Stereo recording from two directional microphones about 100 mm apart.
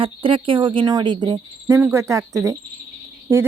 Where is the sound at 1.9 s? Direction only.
30° right (ahead or behind).